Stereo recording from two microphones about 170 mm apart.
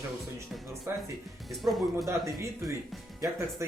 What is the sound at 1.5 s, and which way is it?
Speech, centre (ahead or behind).